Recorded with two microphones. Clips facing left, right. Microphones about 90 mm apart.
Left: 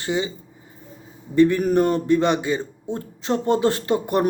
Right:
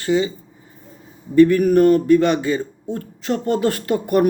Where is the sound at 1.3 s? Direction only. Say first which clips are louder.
Right 4 dB; 25° left (ahead or behind).